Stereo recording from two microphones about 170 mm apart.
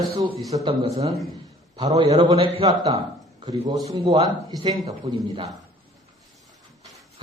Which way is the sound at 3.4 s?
20° right (ahead or behind).